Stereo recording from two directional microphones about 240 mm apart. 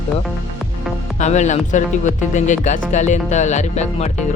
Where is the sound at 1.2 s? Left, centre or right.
Left.